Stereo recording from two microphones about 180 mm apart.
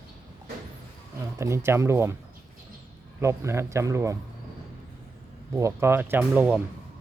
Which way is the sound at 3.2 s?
15° right (ahead or behind).